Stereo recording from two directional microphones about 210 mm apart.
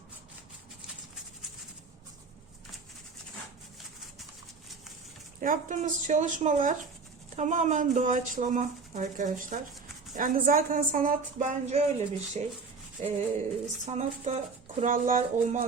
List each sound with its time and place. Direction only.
5.4 s a woman's voice: 40° right (ahead or behind)